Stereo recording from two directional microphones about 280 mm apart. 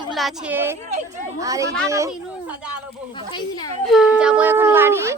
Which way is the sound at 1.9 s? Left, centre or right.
Centre.